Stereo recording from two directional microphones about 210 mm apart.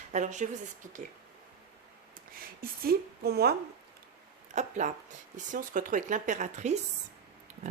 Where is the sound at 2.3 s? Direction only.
45° right (ahead or behind).